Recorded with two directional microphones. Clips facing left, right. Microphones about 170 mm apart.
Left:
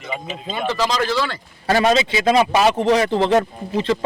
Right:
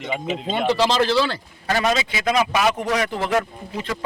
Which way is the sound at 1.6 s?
30° left (ahead or behind).